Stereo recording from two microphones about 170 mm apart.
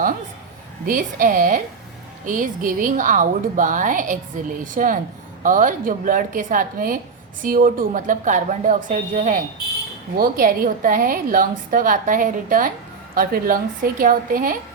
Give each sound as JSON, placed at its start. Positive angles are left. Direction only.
{"t": 0.9, "sound": "a woman's voice", "side_deg": -55}